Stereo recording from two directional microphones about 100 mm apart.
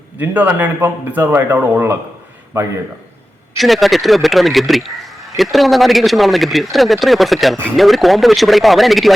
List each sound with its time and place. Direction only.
0.2 s speech: 20° right (ahead or behind)
3.6 s speech: centre (ahead or behind)